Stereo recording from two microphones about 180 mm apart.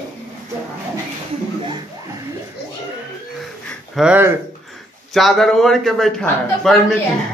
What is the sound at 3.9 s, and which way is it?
A man's voice, 5° right (ahead or behind).